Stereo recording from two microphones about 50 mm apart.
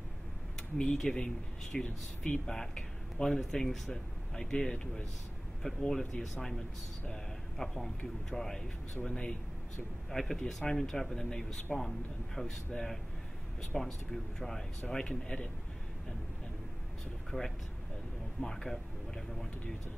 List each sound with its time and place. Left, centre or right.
1.1 s speech: centre
10.1 s speech: centre
17.3 s speech: centre
18.4 s speech: centre